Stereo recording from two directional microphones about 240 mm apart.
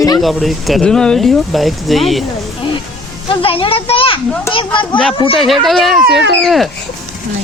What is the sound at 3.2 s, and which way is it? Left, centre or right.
A child's voice, left.